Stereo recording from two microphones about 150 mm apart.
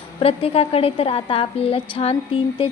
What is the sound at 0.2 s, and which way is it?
A woman's voice, 40° left (ahead or behind).